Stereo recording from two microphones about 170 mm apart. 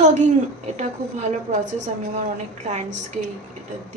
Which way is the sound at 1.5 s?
45° right (ahead or behind).